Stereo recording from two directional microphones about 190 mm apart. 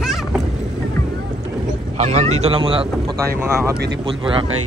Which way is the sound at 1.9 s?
35° right (ahead or behind).